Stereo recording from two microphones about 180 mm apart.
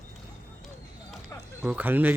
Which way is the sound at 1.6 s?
10° right (ahead or behind).